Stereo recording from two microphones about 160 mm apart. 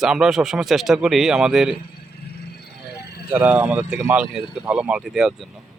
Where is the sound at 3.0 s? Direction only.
90° left.